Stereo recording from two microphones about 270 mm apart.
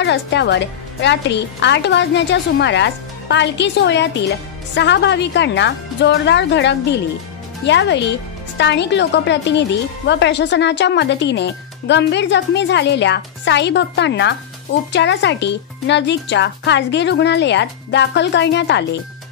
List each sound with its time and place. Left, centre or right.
0.0 s speech: left